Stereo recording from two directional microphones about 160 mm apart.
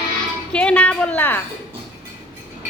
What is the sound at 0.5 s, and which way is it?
Speech, 5° left (ahead or behind).